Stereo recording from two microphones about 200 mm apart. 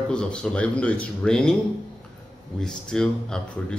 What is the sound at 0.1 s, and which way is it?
Speech, 5° left (ahead or behind).